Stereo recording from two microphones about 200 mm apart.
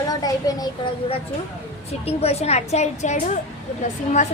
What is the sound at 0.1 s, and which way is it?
Speech, 20° left (ahead or behind).